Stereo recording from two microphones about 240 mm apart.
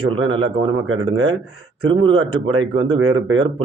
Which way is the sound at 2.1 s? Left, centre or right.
Right.